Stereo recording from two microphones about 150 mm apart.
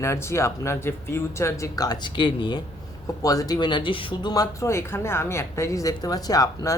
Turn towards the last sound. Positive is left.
turn(degrees=25)  # may be behind; listen again after turning